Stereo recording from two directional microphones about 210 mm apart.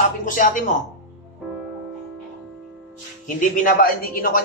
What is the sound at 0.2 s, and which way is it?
Speech, 40° left (ahead or behind).